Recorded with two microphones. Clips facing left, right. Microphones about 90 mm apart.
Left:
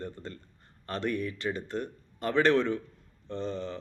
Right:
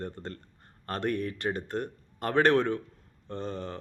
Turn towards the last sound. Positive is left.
turn(degrees=-50)  # may be behind; listen again after turning